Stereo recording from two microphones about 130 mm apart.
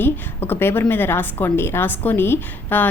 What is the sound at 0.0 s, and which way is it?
A woman's voice, 15° left (ahead or behind).